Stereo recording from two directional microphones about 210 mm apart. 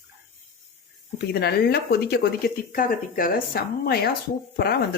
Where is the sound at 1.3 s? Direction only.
50° left (ahead or behind).